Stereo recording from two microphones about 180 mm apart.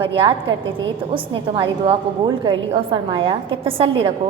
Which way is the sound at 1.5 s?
30° right (ahead or behind).